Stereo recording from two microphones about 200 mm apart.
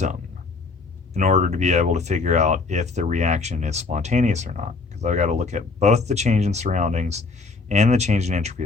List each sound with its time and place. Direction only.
1.1 s speech: 35° right (ahead or behind)